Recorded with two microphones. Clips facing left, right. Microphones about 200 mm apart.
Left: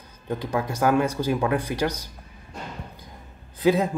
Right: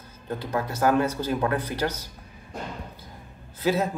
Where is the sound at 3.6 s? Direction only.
15° left (ahead or behind).